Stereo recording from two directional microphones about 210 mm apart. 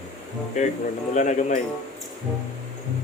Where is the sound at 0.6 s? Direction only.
35° left (ahead or behind).